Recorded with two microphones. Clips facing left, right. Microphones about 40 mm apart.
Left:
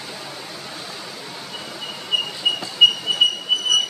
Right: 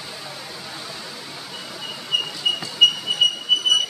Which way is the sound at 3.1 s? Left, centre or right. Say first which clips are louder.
Left 1 dB; centre.